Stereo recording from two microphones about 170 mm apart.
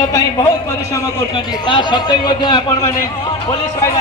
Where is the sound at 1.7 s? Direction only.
25° left (ahead or behind).